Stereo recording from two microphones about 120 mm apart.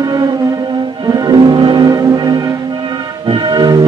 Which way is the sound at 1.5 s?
40° right (ahead or behind).